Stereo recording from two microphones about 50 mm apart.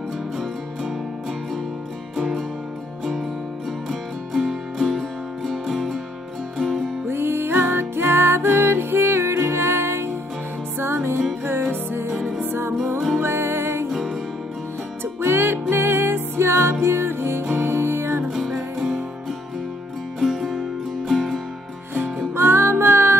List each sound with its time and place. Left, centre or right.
2.1 s music: centre
4.5 s music: centre
7.1 s music: right
13.2 s music: right
13.8 s music: centre
15.2 s music: right
18.3 s music: centre
18.8 s music: centre
20.2 s music: centre
22.3 s music: right